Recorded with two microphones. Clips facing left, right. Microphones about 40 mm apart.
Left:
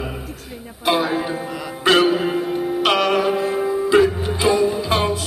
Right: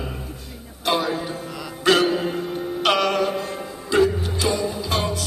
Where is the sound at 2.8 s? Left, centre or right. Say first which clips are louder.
Left 2 dB; centre.